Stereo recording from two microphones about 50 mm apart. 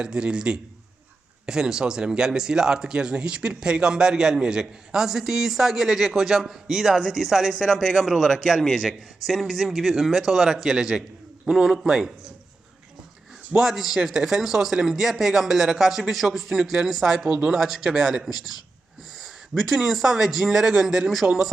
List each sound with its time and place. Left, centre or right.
0.0 s speech: centre
13.6 s speech: centre
19.5 s speech: centre